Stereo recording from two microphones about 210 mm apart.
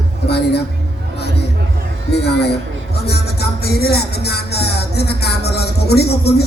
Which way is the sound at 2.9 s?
50° left (ahead or behind).